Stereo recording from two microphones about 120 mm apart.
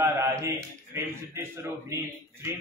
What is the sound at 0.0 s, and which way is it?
Mantra, 20° right (ahead or behind).